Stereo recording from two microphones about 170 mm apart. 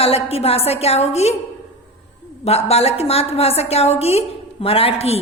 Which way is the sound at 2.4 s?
40° left (ahead or behind).